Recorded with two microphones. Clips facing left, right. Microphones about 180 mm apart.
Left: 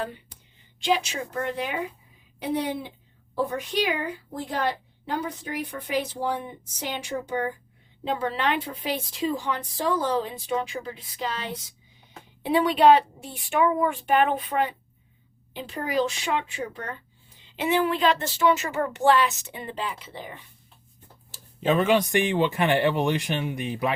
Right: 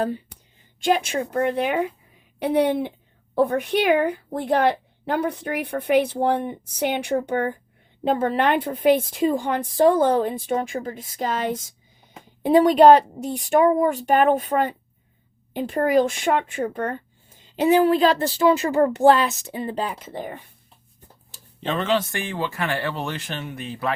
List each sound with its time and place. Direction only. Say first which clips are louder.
0.8 s a woman's voice: right 4 dB; 50° right (ahead or behind)
21.3 s speech: left 4 dB; 5° left (ahead or behind)